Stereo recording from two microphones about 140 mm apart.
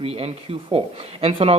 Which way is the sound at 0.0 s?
45° right (ahead or behind).